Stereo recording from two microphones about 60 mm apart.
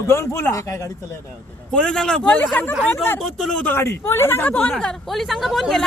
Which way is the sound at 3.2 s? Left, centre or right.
Centre.